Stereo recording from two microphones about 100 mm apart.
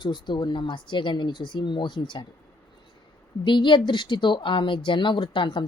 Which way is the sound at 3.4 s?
55° left (ahead or behind).